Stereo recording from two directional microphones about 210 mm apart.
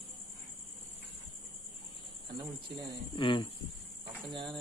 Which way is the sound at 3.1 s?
25° left (ahead or behind).